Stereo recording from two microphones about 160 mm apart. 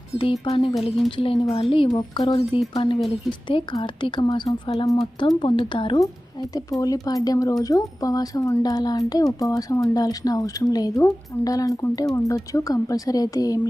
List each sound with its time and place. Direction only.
0.2 s speech: 35° left (ahead or behind)
0.8 s a woman's voice: centre (ahead or behind)
1.1 s speech: 35° left (ahead or behind)